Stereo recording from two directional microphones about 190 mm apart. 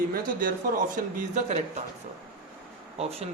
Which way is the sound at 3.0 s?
30° right (ahead or behind).